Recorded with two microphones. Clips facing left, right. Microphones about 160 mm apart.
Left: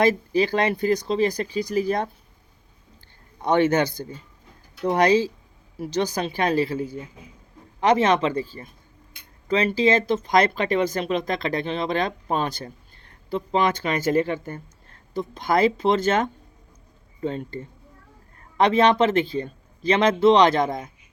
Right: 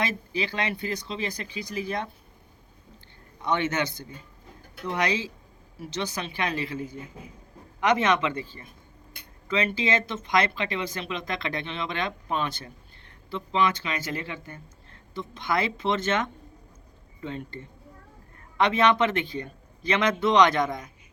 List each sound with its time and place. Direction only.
0.0 s speech: 40° left (ahead or behind)
3.4 s speech: 40° left (ahead or behind)
7.8 s speech: 30° left (ahead or behind)